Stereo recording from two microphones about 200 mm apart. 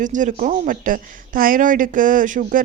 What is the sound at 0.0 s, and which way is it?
Speech, 40° right (ahead or behind).